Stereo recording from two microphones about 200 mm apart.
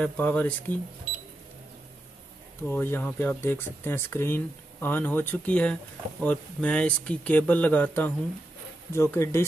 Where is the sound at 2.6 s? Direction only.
10° left (ahead or behind).